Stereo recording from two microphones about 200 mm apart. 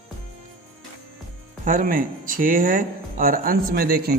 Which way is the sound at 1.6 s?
45° right (ahead or behind).